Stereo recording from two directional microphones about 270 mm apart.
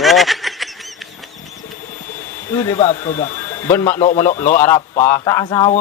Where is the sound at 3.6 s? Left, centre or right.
Centre.